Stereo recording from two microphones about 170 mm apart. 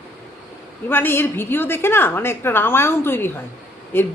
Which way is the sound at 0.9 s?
10° left (ahead or behind).